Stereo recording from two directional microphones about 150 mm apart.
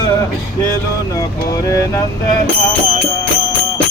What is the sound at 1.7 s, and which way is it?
Vehicle, 20° left (ahead or behind).